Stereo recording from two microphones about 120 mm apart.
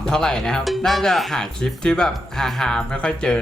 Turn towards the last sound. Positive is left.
turn(degrees=10)  # may be behind; listen again after turning